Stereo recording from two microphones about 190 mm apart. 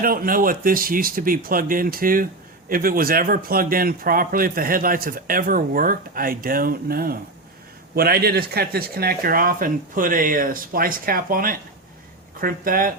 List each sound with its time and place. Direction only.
0.0 s a man's voice: 50° right (ahead or behind)